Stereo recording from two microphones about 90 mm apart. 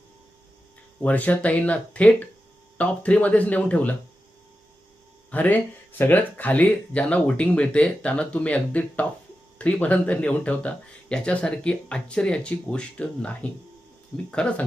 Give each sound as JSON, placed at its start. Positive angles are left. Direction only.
{"t": 1.0, "sound": "speech", "side_deg": 15}
{"t": 5.3, "sound": "speech", "side_deg": 20}